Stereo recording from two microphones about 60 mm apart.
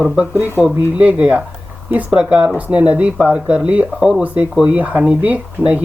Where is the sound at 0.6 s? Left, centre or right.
Centre.